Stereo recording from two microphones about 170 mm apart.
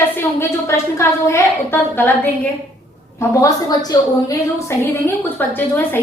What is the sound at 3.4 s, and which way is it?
A woman's voice, 20° left (ahead or behind).